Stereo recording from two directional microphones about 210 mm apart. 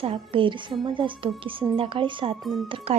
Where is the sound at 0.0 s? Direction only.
25° right (ahead or behind).